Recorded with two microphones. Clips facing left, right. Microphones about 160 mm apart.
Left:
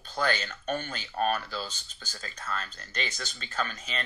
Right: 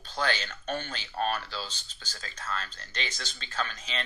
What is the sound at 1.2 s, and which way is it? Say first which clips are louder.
Speech: left 3 dB; 50° left (ahead or behind).